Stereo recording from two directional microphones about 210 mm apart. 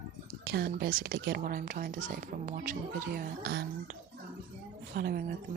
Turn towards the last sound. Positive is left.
turn(degrees=-45)  # may be behind; listen again after turning